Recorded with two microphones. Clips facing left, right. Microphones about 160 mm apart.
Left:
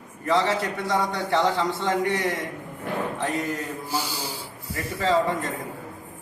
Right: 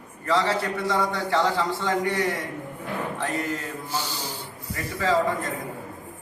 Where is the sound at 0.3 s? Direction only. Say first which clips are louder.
Left 1 dB; 20° left (ahead or behind).